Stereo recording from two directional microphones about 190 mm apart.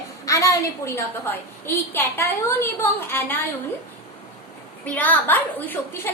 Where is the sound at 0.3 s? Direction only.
15° left (ahead or behind).